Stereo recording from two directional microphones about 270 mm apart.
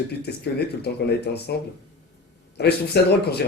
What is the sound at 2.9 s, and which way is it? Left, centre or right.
Speech, left.